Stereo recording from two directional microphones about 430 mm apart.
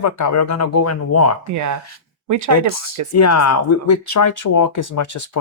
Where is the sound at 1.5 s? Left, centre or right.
Right.